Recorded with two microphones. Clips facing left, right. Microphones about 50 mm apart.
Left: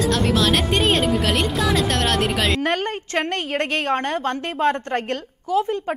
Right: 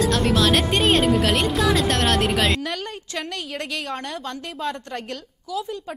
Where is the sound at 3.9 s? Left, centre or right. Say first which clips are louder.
Left 8 dB; left.